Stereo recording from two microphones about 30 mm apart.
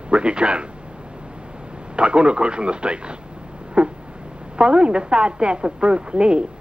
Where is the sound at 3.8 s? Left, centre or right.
Right.